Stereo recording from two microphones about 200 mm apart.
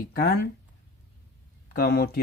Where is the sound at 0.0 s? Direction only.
50° left (ahead or behind).